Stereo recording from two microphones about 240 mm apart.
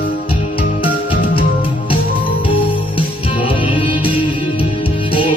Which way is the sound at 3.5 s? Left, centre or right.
Left.